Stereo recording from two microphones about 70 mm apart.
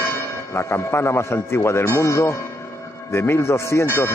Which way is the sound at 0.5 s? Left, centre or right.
Left.